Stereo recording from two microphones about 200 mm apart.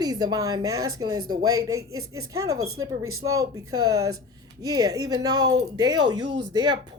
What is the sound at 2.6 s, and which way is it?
Speech, 90° right.